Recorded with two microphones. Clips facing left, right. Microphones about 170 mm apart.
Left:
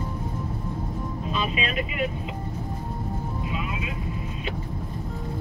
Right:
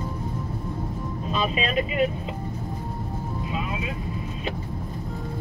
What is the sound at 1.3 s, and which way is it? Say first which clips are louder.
Vehicle: right 3 dB; 35° right (ahead or behind).